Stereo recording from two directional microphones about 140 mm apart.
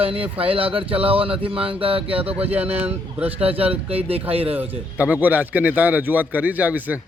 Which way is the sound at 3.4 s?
45° right (ahead or behind).